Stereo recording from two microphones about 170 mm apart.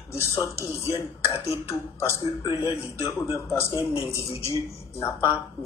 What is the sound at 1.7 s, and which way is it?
A man's voice, 15° left (ahead or behind).